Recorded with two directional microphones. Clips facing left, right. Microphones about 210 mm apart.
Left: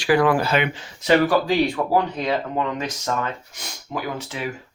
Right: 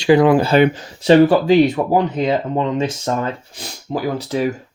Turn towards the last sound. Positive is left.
turn(degrees=-40)  # may be behind; listen again after turning